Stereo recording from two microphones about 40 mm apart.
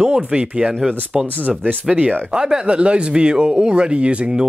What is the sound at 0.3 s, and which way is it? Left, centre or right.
Speech, right.